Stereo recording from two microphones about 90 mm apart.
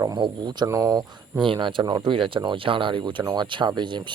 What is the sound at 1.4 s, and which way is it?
Speech, 65° right (ahead or behind).